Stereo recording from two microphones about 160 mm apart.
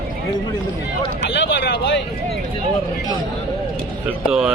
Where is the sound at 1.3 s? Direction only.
90° left.